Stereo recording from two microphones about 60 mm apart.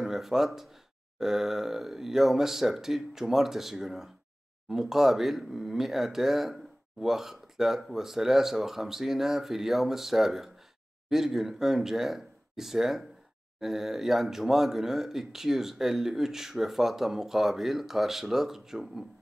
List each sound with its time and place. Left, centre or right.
0.0 s speech: centre